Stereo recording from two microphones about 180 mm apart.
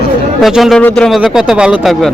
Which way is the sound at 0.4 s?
Centre (ahead or behind).